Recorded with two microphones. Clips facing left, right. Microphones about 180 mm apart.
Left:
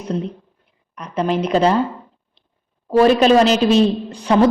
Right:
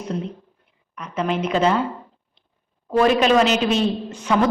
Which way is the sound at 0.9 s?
35° left (ahead or behind).